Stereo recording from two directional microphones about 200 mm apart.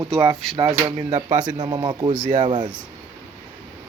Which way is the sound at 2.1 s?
40° right (ahead or behind).